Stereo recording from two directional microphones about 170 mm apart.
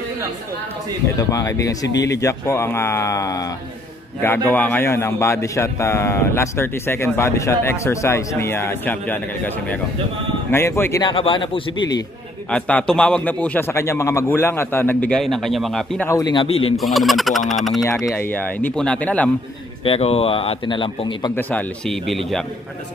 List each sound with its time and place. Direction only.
1.1 s a man's voice: 20° left (ahead or behind)
11.1 s speech: 30° left (ahead or behind)
12.4 s a man's voice: 5° left (ahead or behind)
16.1 s speech: 20° left (ahead or behind)
16.7 s speech: centre (ahead or behind)
18.0 s a man's voice: 10° left (ahead or behind)
19.8 s a man's voice: 35° left (ahead or behind)
21.4 s speech: 10° left (ahead or behind)